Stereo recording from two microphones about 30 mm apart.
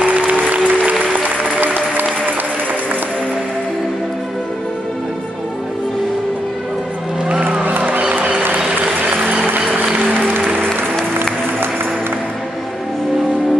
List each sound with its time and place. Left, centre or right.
0.3 s music: right
1.1 s music: right
8.2 s music: right
10.2 s music: right